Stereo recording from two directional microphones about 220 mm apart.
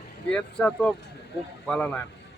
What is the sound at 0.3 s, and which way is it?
Speech, 5° left (ahead or behind).